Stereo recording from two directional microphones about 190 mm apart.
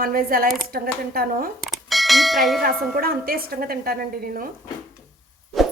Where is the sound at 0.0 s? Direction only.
50° right (ahead or behind).